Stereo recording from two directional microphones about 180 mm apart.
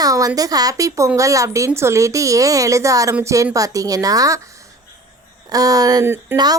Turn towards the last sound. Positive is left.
turn(degrees=-15)  # may be behind; listen again after turning